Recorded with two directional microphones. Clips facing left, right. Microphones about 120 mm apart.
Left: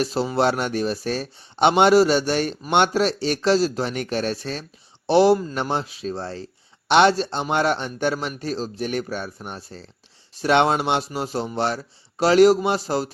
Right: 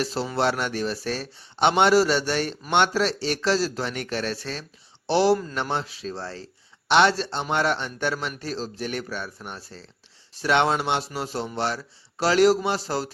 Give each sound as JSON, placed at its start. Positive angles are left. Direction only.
{"t": 0.0, "sound": "speech", "side_deg": 15}